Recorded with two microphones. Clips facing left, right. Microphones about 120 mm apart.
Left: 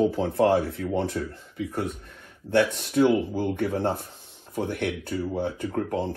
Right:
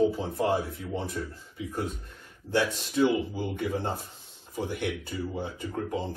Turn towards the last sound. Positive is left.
turn(degrees=60)  # may be behind; listen again after turning